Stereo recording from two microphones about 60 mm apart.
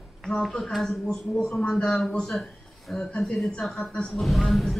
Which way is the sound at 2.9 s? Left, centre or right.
Centre.